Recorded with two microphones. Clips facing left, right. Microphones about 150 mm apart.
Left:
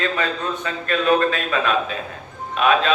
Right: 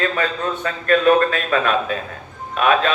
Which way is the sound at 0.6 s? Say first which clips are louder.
Right 5 dB; 50° right (ahead or behind).